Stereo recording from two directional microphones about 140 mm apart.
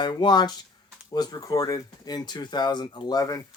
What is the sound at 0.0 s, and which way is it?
Speech, 30° left (ahead or behind).